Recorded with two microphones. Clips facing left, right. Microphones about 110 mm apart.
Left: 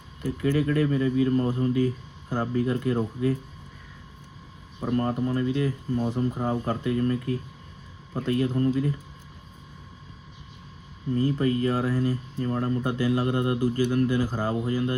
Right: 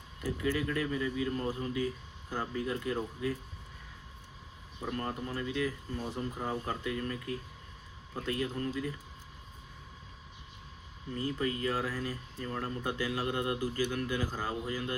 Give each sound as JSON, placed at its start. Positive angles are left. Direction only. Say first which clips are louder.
{"t": 0.3, "sound": "speech", "louder": "left 8 dB", "side_deg": 45}
{"t": 4.8, "sound": "speech", "louder": "left 11 dB", "side_deg": 40}
{"t": 11.1, "sound": "speech", "louder": "left 10 dB", "side_deg": 35}